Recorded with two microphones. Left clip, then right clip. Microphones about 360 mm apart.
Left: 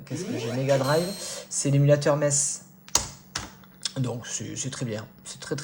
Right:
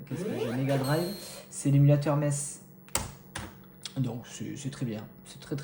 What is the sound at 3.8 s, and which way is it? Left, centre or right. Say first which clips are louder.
A woman's voice: left 6 dB; left.